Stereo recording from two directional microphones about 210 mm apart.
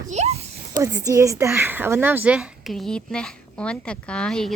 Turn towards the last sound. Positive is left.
turn(degrees=5)  # may be behind; listen again after turning